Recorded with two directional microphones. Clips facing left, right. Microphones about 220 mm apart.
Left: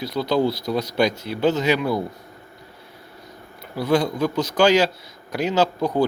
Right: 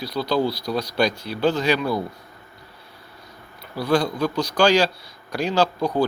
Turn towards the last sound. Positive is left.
turn(degrees=20)  # may be behind; listen again after turning